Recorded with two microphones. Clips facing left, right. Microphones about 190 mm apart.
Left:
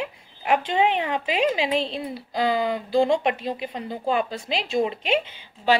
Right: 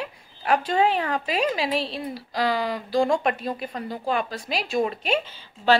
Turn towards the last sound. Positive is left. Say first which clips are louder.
# right 1 dB
turn(degrees=20)  # may be behind; listen again after turning